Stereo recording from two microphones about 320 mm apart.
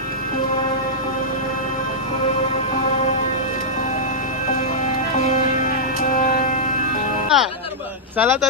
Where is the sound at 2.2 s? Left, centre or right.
Centre.